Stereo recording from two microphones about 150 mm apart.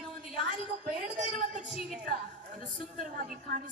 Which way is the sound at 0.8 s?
55° right (ahead or behind).